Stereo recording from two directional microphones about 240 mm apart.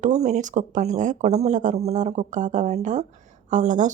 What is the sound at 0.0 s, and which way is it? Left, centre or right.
Speech, right.